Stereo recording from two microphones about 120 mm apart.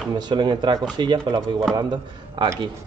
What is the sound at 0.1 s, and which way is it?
Speech, 35° right (ahead or behind).